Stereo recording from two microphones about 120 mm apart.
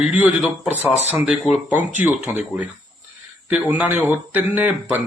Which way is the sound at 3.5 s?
15° right (ahead or behind).